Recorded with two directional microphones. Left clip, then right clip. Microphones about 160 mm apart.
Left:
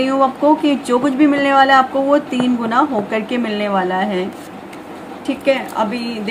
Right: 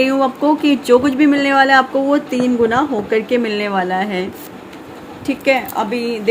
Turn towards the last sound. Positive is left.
turn(degrees=-45)  # may be behind; listen again after turning